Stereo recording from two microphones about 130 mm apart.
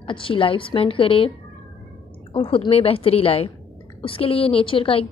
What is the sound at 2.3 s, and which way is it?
A woman's voice, 45° left (ahead or behind).